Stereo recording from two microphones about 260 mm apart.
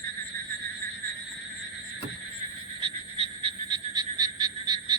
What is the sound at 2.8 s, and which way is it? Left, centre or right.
Frog, centre.